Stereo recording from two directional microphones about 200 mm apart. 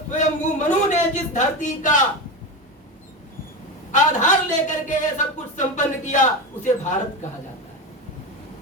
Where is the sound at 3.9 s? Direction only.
40° left (ahead or behind).